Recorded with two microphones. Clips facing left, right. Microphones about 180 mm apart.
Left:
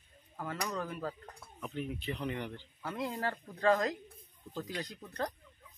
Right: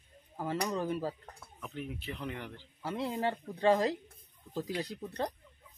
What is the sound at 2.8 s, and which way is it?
Speech, 30° right (ahead or behind).